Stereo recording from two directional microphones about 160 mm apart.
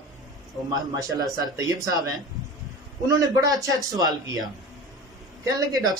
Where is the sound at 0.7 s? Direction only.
25° right (ahead or behind).